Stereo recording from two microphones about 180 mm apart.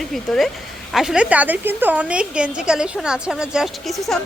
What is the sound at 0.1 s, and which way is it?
A woman's voice, centre (ahead or behind).